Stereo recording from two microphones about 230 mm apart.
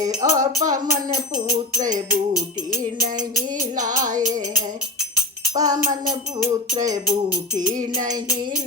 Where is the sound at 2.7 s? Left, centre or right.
Centre.